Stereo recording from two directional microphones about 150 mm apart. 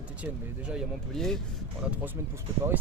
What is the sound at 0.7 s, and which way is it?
Speech, centre (ahead or behind).